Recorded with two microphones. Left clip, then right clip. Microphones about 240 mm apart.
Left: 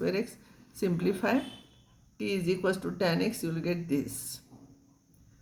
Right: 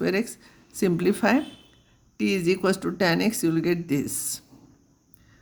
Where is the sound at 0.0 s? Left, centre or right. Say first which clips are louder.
Right 5 dB; right.